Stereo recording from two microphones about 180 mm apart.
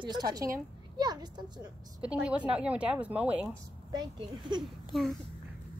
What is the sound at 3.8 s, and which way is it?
Speech, 25° right (ahead or behind).